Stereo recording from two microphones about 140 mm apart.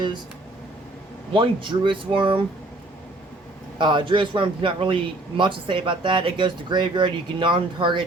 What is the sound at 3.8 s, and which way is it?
A man's voice, 35° right (ahead or behind).